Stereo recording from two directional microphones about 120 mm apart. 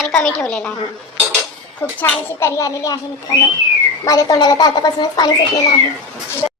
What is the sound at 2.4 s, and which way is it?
Speech, 25° left (ahead or behind).